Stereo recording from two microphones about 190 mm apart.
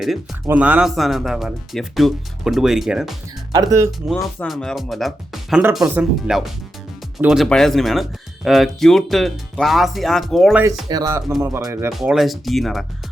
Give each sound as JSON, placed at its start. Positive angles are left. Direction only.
{"t": 0.4, "sound": "speech", "side_deg": -10}
{"t": 3.5, "sound": "speech", "side_deg": -20}
{"t": 4.1, "sound": "speech", "side_deg": 5}
{"t": 10.6, "sound": "speech", "side_deg": -20}
{"t": 11.9, "sound": "speech", "side_deg": 0}